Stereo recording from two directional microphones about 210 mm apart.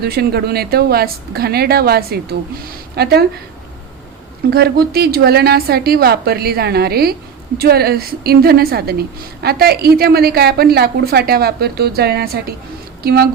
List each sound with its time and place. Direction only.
0.0 s a woman's voice: 50° right (ahead or behind)
4.5 s a woman's voice: 50° right (ahead or behind)